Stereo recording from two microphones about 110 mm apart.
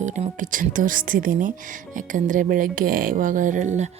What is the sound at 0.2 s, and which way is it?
Music, 90° right.